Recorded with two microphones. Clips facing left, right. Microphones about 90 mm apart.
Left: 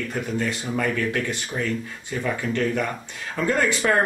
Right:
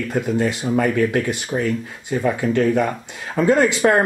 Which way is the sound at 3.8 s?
35° right (ahead or behind).